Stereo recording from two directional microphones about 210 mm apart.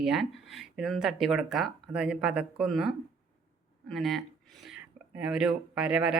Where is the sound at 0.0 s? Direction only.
Centre (ahead or behind).